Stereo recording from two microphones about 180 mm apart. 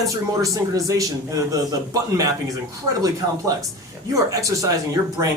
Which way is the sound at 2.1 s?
20° right (ahead or behind).